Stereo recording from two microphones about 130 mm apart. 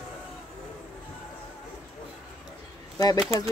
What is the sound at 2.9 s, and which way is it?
Speech, 30° left (ahead or behind).